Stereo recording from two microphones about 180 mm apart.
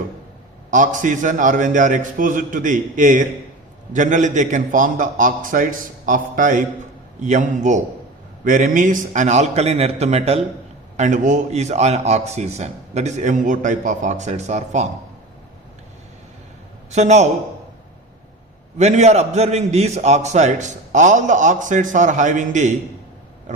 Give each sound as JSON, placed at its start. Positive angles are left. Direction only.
{"t": 0.7, "sound": "a man's voice", "side_deg": -45}
{"t": 16.9, "sound": "a man's voice", "side_deg": -40}
{"t": 18.8, "sound": "a man's voice", "side_deg": -40}